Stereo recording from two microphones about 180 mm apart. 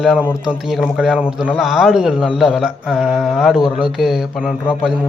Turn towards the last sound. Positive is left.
turn(degrees=-5)  # may be behind; listen again after turning